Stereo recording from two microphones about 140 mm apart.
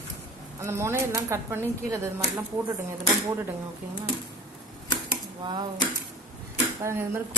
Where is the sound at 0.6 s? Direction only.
20° right (ahead or behind).